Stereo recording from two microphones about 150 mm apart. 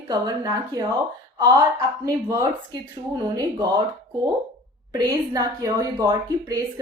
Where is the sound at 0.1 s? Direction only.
25° right (ahead or behind).